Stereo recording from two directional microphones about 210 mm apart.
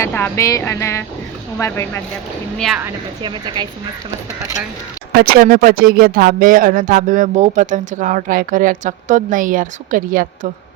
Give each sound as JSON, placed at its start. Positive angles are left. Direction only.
{"t": 0.0, "sound": "speech", "side_deg": 10}
{"t": 2.6, "sound": "a woman's voice", "side_deg": 0}
{"t": 3.2, "sound": "a woman's voice", "side_deg": -20}
{"t": 5.2, "sound": "speech", "side_deg": -45}